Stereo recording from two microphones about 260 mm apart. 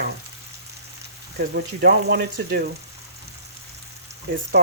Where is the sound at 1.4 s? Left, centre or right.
Right.